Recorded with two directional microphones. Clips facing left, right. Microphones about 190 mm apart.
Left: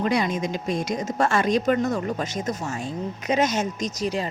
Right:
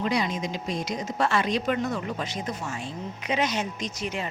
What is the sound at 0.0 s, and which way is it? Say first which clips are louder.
A woman's voice: left 4 dB; 50° left (ahead or behind).